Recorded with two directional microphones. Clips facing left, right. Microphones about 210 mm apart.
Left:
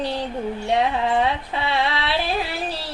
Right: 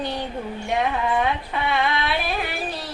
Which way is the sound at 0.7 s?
30° left (ahead or behind).